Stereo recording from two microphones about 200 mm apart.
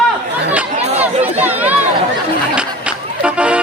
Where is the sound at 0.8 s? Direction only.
30° right (ahead or behind).